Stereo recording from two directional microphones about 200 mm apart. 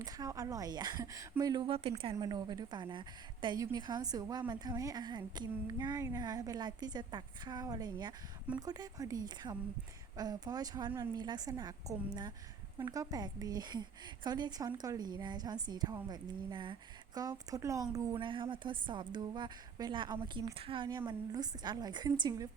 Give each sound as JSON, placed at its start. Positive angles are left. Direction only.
{"t": 0.0, "sound": "a woman's voice", "side_deg": -15}